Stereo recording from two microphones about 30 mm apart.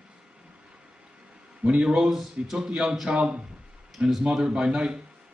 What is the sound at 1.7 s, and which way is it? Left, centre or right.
Speech, right.